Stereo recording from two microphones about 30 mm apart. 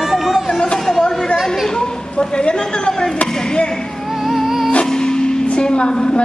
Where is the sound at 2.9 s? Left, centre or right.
Left.